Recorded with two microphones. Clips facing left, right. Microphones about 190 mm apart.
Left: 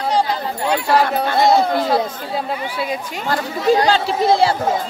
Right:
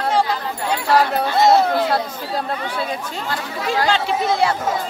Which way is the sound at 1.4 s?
Centre (ahead or behind).